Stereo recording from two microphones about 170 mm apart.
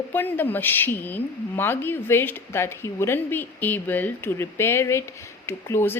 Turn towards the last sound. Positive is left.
turn(degrees=15)  # may be behind; listen again after turning